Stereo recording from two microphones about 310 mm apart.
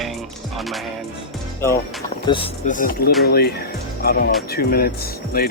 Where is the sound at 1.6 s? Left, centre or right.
Centre.